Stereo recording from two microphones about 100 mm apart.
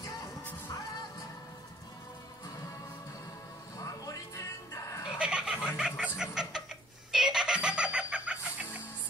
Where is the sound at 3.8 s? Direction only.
35° left (ahead or behind).